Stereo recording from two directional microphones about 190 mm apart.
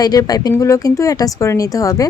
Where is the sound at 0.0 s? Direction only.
20° left (ahead or behind).